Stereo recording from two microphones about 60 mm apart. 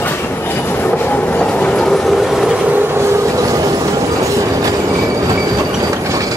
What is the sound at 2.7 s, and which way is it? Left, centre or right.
Train, right.